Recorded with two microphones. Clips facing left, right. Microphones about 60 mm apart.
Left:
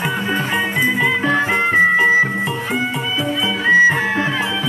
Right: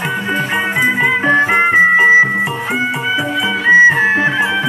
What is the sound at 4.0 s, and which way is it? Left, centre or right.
Music, right.